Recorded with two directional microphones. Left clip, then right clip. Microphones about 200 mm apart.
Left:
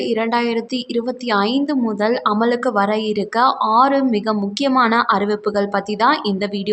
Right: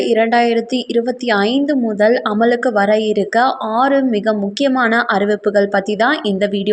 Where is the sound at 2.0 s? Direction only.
10° right (ahead or behind).